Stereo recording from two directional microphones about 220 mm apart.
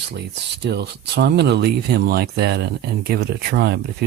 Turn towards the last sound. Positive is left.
turn(degrees=-45)  # may be behind; listen again after turning